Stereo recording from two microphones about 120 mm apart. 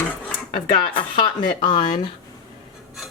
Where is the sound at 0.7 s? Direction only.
45° left (ahead or behind).